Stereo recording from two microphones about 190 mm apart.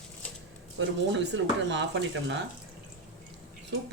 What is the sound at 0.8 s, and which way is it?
Speech, 75° right (ahead or behind).